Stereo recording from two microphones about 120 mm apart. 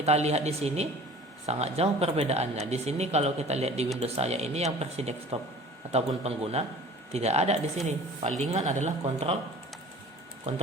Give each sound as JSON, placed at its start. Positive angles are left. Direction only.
{"t": 0.0, "sound": "speech", "side_deg": -65}